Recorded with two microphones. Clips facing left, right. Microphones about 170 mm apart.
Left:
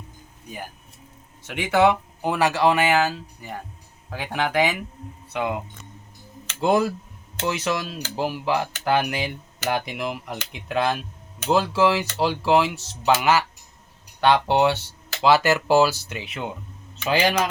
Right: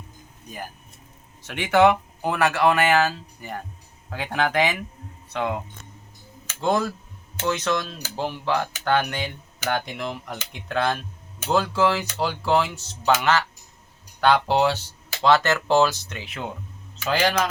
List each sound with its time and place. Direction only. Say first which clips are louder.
1.5 s speech: right 1 dB; 10° left (ahead or behind)
6.6 s speech: left 3 dB; 10° left (ahead or behind)
17.1 s speech: left 1 dB; 10° left (ahead or behind)